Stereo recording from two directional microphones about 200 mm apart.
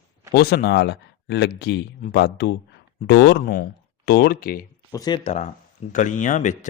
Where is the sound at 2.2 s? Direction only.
60° left (ahead or behind).